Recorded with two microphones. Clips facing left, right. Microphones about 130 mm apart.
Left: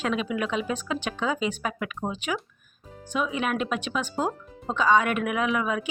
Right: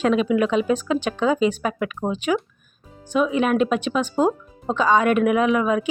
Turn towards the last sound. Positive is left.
turn(degrees=-35)  # may be behind; listen again after turning